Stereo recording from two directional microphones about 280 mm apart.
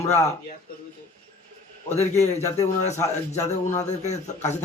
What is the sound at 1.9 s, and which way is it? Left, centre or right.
Speech, left.